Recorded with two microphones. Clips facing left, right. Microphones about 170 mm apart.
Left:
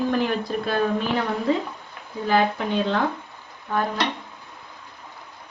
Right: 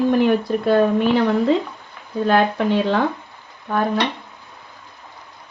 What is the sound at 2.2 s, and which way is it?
Speech, 70° right (ahead or behind).